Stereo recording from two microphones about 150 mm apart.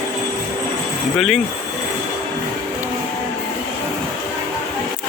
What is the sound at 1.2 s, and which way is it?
Speech, centre (ahead or behind).